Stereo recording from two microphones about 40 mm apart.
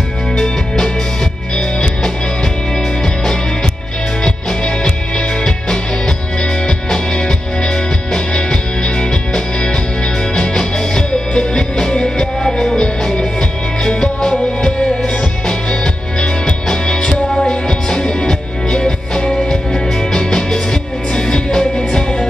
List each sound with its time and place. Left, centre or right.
0.4 s music: centre
4.2 s music: centre